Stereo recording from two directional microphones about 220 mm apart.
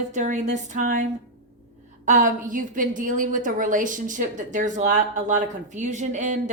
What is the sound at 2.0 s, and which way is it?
Speech, 35° right (ahead or behind).